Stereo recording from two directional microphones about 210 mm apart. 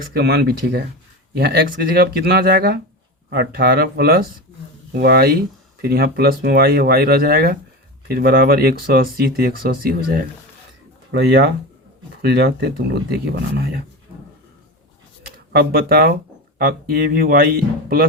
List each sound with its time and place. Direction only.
0.1 s speech: 50° right (ahead or behind)
15.5 s speech: 45° right (ahead or behind)